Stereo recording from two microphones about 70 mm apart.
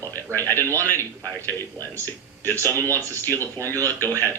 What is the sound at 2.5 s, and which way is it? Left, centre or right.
Speech, right.